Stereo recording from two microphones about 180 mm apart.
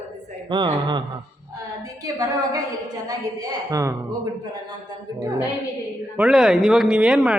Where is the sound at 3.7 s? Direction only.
15° right (ahead or behind).